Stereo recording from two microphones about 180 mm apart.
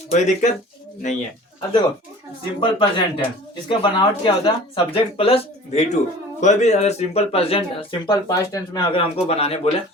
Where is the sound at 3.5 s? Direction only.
25° left (ahead or behind).